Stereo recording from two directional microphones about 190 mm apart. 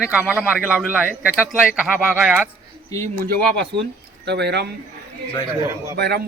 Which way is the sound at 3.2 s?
55° right (ahead or behind).